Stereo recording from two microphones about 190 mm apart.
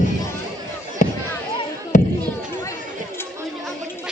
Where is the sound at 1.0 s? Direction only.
40° left (ahead or behind).